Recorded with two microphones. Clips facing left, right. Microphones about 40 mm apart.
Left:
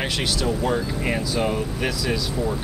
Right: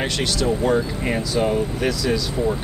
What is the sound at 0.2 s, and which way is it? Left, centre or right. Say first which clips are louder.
Speech: right 4 dB; centre.